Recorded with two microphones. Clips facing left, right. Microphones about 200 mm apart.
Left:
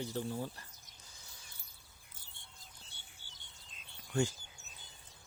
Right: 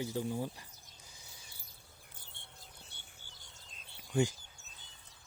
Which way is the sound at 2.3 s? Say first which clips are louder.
Right 2 dB; 60° right (ahead or behind).